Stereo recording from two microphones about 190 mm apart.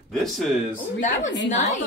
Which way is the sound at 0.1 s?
Centre (ahead or behind).